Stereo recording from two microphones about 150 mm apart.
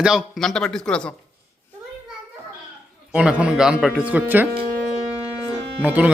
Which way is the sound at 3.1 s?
5° right (ahead or behind).